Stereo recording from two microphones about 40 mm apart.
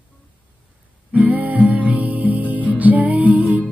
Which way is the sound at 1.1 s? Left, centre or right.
Right.